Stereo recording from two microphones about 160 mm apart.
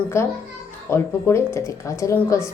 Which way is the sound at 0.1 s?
15° left (ahead or behind).